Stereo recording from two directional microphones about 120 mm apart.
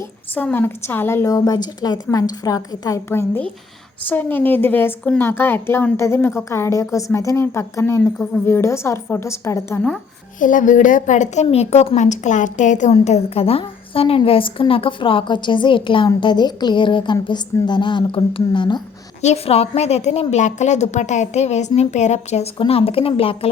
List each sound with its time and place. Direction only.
0.3 s a woman's voice: 15° left (ahead or behind)
10.4 s a woman's voice: 90° left
12.9 s a woman's voice: 60° left (ahead or behind); by 18.8 s 40° left (ahead or behind)
19.2 s a woman's voice: 65° left (ahead or behind)
22.5 s a woman's voice: 50° left (ahead or behind)